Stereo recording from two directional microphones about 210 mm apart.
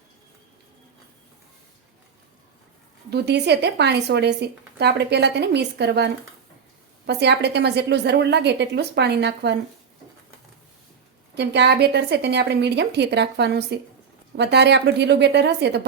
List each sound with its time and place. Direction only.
3.1 s speech: 50° right (ahead or behind)
7.1 s speech: 55° right (ahead or behind)
11.3 s speech: 55° right (ahead or behind)